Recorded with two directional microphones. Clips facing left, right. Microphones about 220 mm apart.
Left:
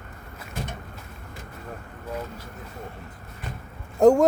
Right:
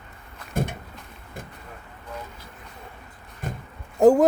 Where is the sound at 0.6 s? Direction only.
55° right (ahead or behind).